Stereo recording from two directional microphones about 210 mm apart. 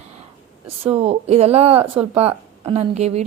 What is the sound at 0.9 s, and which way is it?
Speech, 30° right (ahead or behind).